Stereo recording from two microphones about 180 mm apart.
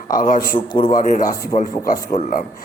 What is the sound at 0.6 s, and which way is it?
Speech, 25° left (ahead or behind).